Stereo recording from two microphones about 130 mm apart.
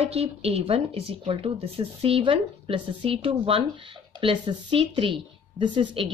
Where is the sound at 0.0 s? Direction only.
50° right (ahead or behind).